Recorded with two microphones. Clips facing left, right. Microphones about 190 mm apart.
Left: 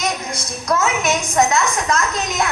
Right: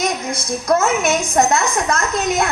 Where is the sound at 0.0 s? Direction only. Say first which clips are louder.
Right 3 dB; 55° right (ahead or behind).